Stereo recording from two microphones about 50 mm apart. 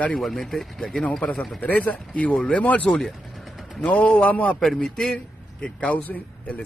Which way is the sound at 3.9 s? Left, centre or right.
Left.